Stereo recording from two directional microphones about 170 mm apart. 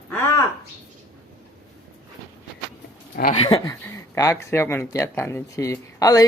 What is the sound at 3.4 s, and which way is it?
Speech, 30° left (ahead or behind).